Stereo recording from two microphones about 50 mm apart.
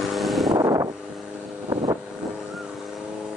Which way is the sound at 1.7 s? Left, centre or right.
Right.